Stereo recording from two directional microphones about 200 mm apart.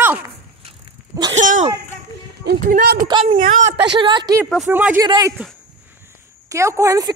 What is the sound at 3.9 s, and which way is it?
Speech, 25° right (ahead or behind).